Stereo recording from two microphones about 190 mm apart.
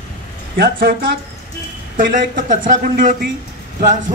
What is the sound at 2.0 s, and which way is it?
Speech, 45° right (ahead or behind).